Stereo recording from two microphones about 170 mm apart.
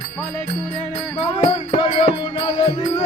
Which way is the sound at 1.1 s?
30° left (ahead or behind).